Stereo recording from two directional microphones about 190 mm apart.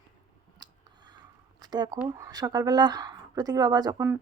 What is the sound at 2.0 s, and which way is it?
Speech, 20° right (ahead or behind).